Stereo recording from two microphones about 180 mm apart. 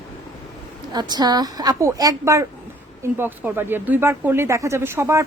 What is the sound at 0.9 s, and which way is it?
A woman's voice, 25° right (ahead or behind).